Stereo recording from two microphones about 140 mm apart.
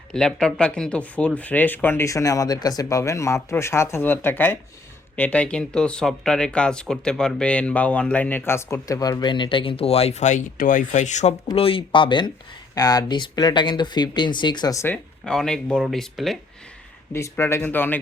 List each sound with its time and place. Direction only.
0.1 s speech: 5° left (ahead or behind); by 11.3 s 55° left (ahead or behind)
11.5 s speech: 40° left (ahead or behind); by 14.9 s 20° left (ahead or behind)
15.2 s speech: 5° left (ahead or behind)
17.1 s speech: 20° left (ahead or behind)